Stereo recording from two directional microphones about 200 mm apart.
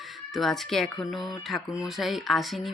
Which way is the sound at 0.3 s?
Centre (ahead or behind).